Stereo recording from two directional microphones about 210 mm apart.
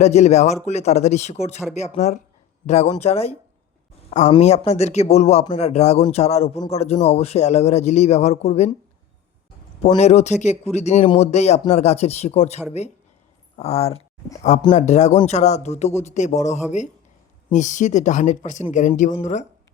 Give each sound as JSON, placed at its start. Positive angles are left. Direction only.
{"t": 0.0, "sound": "a man's voice", "side_deg": 30}
{"t": 4.4, "sound": "a man's voice", "side_deg": 30}
{"t": 9.8, "sound": "a man's voice", "side_deg": 30}